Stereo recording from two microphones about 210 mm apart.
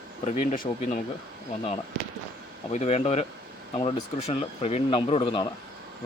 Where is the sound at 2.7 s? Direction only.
30° left (ahead or behind).